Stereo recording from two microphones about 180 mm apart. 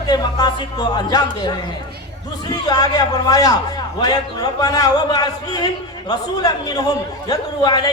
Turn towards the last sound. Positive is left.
turn(degrees=20)  # may be behind; listen again after turning